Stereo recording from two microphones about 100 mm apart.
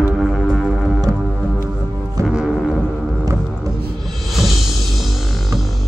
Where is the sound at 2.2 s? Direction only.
5° right (ahead or behind).